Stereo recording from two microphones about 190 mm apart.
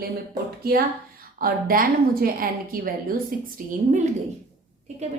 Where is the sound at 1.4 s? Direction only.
50° right (ahead or behind).